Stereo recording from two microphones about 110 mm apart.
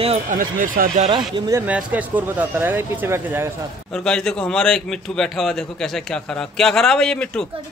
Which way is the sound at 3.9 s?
5° left (ahead or behind).